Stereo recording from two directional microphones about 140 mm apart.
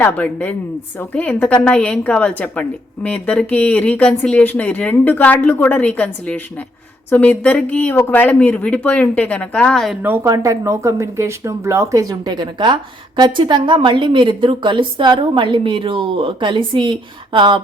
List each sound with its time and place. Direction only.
0.0 s a woman's voice: 10° left (ahead or behind)
10.0 s a woman's voice: 15° right (ahead or behind); by 17.6 s 35° right (ahead or behind)